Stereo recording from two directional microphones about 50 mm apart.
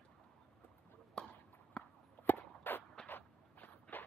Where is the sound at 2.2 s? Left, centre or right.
Left.